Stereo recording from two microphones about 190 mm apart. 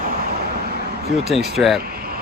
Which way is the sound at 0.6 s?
55° right (ahead or behind).